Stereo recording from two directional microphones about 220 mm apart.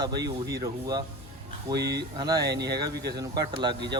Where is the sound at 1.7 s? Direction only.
50° right (ahead or behind).